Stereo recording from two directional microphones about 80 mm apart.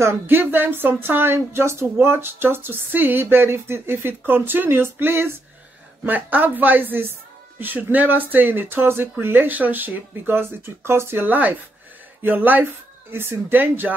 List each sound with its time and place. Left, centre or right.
0.0 s speech: right